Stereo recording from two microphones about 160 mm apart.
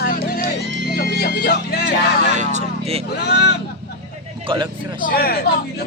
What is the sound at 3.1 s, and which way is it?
Speech, 90° left.